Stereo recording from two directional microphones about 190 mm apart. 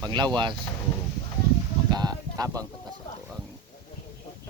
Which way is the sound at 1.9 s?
20° right (ahead or behind).